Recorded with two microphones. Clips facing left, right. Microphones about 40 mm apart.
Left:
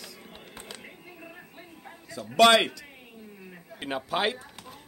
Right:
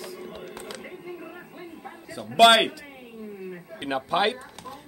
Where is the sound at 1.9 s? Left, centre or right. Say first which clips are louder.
Even; right.